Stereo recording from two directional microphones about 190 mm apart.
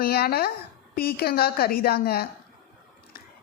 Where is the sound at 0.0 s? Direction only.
55° left (ahead or behind).